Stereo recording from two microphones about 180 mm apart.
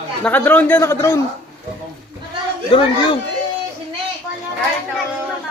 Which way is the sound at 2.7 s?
25° left (ahead or behind).